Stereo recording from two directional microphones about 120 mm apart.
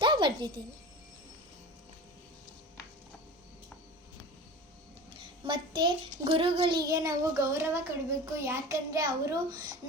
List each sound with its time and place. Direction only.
0.0 s a sound: 40° right (ahead or behind)
5.1 s child singing: 40° right (ahead or behind)
6.8 s child singing: 30° right (ahead or behind)